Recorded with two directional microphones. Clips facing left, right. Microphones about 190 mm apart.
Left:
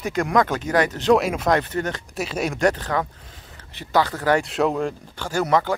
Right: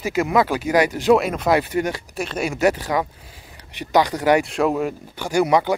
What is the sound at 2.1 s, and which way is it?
Speech, centre (ahead or behind).